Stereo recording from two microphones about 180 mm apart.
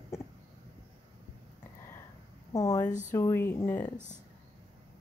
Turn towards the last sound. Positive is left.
turn(degrees=10)  # may be behind; listen again after turning